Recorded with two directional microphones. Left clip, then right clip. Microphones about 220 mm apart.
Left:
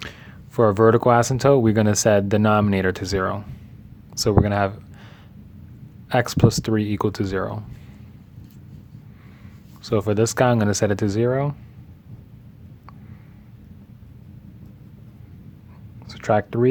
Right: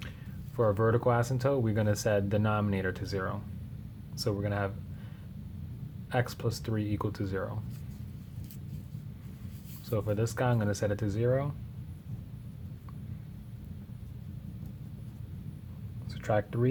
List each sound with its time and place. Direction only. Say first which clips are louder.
0.5 s speech: left 12 dB; 45° left (ahead or behind)
6.1 s speech: left 13 dB; 45° left (ahead or behind)
9.8 s speech: left 12 dB; 45° left (ahead or behind)
16.0 s a sound: left 10 dB; 40° left (ahead or behind)